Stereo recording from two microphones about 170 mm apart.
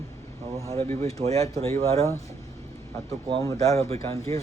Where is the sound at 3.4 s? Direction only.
20° left (ahead or behind).